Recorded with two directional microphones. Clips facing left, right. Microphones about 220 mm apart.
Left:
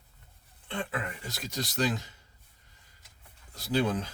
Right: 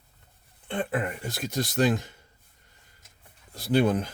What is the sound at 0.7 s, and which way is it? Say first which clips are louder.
Speech: right 6 dB; 50° right (ahead or behind).